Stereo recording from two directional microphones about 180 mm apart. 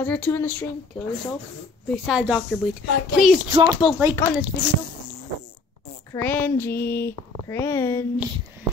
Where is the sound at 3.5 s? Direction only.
20° right (ahead or behind).